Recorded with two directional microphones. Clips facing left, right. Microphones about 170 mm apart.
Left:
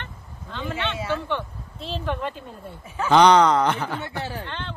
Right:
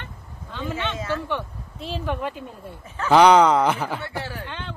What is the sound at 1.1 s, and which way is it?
Speech, 10° right (ahead or behind).